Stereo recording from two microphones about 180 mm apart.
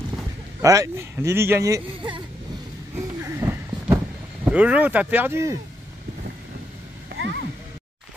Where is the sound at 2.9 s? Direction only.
15° right (ahead or behind).